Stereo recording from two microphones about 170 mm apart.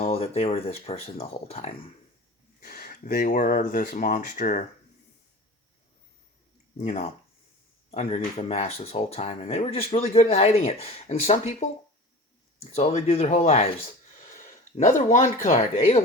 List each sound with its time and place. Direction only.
0.0 s speech: 35° left (ahead or behind)
2.6 s speech: 60° left (ahead or behind)
6.7 s speech: 40° left (ahead or behind)
12.7 s speech: 40° left (ahead or behind)
14.3 s speech: 50° left (ahead or behind)